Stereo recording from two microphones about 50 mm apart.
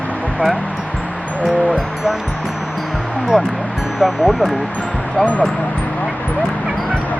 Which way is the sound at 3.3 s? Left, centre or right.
Centre.